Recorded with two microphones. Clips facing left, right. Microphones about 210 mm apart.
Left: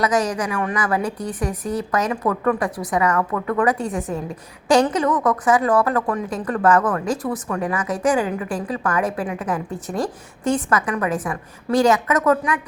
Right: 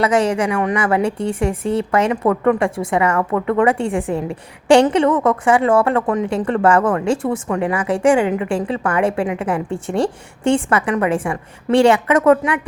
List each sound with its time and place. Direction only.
0.0 s a woman's voice: 25° right (ahead or behind)